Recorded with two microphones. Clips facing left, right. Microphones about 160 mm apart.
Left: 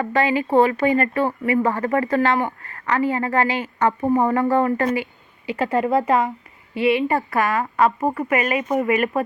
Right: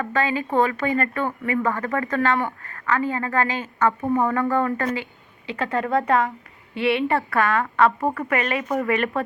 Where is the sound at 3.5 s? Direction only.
10° left (ahead or behind).